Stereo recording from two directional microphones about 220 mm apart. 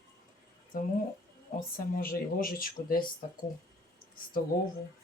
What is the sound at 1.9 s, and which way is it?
Speech, 40° left (ahead or behind).